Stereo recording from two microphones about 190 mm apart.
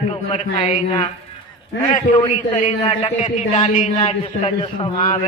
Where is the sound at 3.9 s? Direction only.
30° left (ahead or behind).